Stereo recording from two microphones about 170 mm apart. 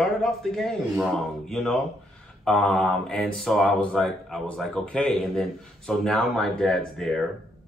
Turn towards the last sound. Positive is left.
turn(degrees=0)  # may be behind; listen again after turning